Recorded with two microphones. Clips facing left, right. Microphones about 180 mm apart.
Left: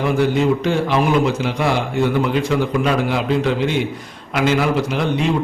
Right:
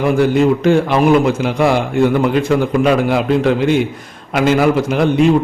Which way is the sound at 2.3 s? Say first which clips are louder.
Right 4 dB; 50° right (ahead or behind).